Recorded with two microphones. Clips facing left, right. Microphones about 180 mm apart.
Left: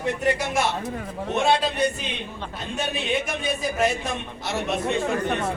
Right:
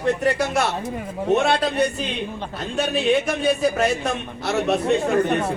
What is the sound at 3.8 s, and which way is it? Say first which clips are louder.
Speech: right 2 dB; 65° right (ahead or behind).